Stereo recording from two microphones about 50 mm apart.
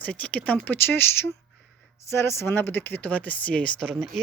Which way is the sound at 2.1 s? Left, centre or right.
Left.